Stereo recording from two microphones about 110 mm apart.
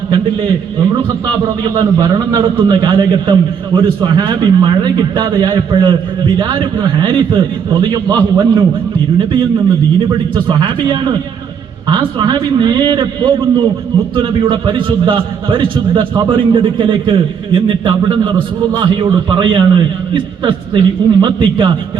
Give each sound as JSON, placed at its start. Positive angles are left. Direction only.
{"t": 0.8, "sound": "a man's voice", "side_deg": -40}
{"t": 10.3, "sound": "a man's voice", "side_deg": -40}